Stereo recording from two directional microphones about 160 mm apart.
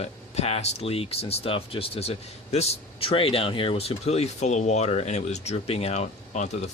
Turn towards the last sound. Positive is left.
turn(degrees=45)  # may be behind; listen again after turning